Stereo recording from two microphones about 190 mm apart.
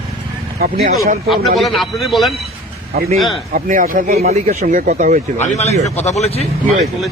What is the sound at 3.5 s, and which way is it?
Speech, 45° right (ahead or behind).